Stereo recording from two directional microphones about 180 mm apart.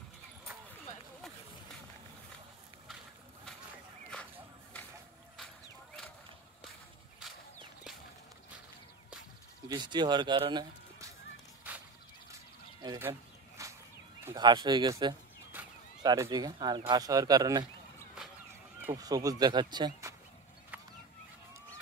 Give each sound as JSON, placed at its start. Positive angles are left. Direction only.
{"t": 4.1, "sound": "a sound", "side_deg": 5}
{"t": 9.7, "sound": "speech", "side_deg": -25}
{"t": 11.7, "sound": "fowl", "side_deg": -10}
{"t": 12.8, "sound": "a sound", "side_deg": -20}
{"t": 13.6, "sound": "whip", "side_deg": -15}
{"t": 14.3, "sound": "speech", "side_deg": -25}
{"t": 15.5, "sound": "a sound", "side_deg": -10}
{"t": 16.0, "sound": "speech", "side_deg": -20}
{"t": 18.8, "sound": "speech", "side_deg": -15}